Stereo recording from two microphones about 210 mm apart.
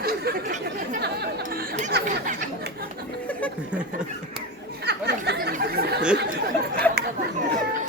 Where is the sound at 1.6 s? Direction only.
35° right (ahead or behind).